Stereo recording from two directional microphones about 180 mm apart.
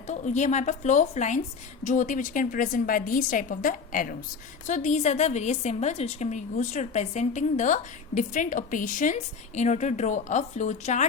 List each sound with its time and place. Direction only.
0.1 s a woman's voice: 40° left (ahead or behind)